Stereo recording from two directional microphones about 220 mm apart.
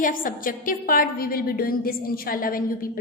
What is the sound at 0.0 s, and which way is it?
A woman's voice, 40° left (ahead or behind).